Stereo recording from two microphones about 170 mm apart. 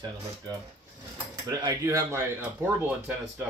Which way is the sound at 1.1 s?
20° right (ahead or behind).